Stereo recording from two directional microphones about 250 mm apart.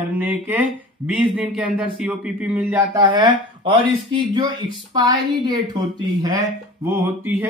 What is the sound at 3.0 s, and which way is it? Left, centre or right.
Speech, centre.